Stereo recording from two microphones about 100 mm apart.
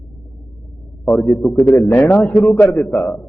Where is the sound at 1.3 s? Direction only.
5° left (ahead or behind).